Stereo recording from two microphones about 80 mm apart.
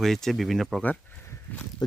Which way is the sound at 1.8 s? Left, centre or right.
Left.